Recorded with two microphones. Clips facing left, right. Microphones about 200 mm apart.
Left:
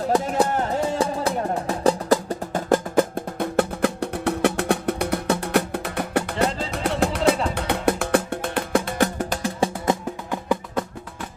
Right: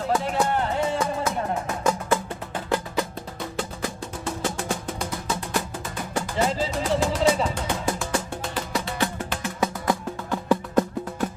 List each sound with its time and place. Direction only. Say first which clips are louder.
0.1 s music: left 3 dB; 40° left (ahead or behind); by 10.4 s 25° left (ahead or behind)